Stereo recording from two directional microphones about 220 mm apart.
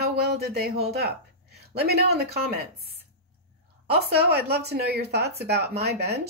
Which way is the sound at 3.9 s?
45° right (ahead or behind).